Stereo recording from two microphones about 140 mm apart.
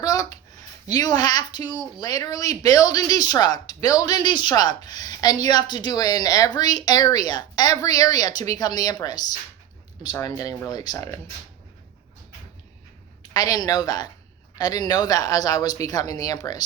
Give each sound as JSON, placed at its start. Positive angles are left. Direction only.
{"t": 0.0, "sound": "a sound", "side_deg": 25}
{"t": 0.9, "sound": "a woman's voice", "side_deg": 25}
{"t": 13.3, "sound": "a woman's voice", "side_deg": 25}